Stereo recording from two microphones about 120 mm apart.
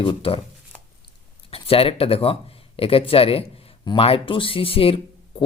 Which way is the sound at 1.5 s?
55° left (ahead or behind).